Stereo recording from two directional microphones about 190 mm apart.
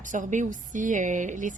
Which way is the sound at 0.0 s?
40° right (ahead or behind).